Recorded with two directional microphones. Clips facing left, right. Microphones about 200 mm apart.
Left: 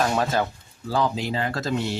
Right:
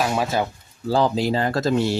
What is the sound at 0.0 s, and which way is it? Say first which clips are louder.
Speech: right 1 dB; 10° right (ahead or behind).